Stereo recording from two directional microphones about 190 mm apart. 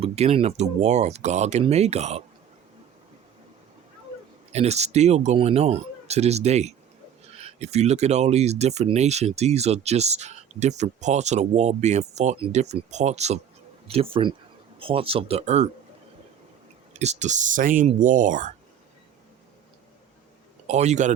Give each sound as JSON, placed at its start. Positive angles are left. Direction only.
{"t": 0.0, "sound": "speech", "side_deg": -30}
{"t": 4.5, "sound": "speech", "side_deg": -35}
{"t": 16.9, "sound": "speech", "side_deg": -35}
{"t": 20.7, "sound": "speech", "side_deg": -35}